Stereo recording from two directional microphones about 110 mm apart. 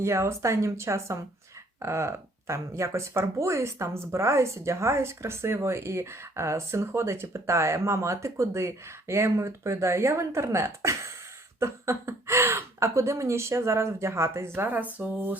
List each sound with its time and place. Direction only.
0.0 s speech: 25° right (ahead or behind)